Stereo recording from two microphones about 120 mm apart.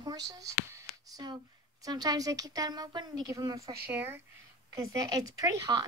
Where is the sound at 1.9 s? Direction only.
35° right (ahead or behind).